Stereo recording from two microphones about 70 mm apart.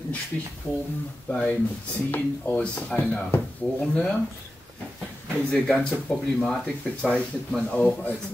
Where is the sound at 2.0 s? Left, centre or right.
Left.